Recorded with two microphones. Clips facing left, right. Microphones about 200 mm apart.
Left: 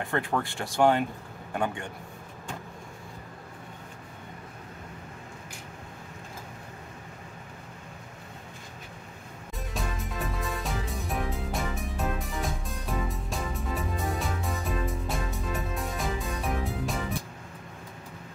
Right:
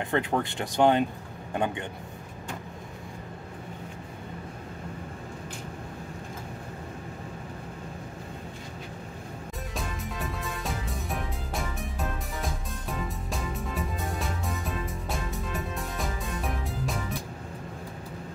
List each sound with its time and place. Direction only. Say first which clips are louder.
0.0 s speech: right 2 dB; 20° right (ahead or behind)
9.8 s music: left 1 dB; centre (ahead or behind)